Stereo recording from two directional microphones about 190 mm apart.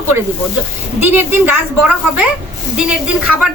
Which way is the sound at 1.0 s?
10° right (ahead or behind).